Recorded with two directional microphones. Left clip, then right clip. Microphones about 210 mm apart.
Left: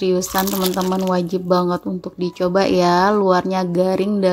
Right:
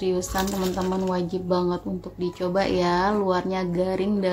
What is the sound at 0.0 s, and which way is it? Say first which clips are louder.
Speech: left 6 dB; 35° left (ahead or behind).